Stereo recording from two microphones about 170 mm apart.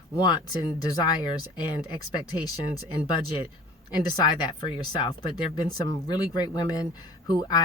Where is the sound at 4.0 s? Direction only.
25° left (ahead or behind).